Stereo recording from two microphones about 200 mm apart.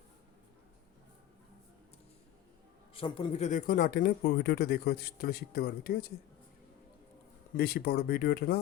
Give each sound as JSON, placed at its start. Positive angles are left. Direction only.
{"t": 2.9, "sound": "speech", "side_deg": 25}
{"t": 7.5, "sound": "speech", "side_deg": 50}